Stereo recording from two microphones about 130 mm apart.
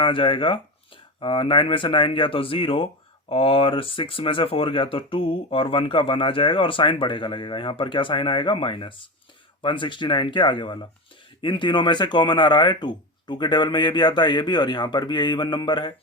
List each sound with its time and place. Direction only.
0.0 s speech: 40° left (ahead or behind)